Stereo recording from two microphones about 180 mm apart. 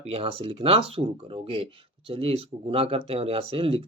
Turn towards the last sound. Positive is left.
turn(degrees=-30)  # may be behind; listen again after turning